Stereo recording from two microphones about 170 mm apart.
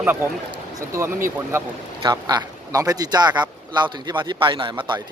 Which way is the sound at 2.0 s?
25° right (ahead or behind).